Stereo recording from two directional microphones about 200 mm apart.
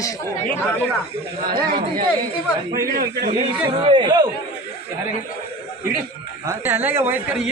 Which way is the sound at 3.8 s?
25° right (ahead or behind).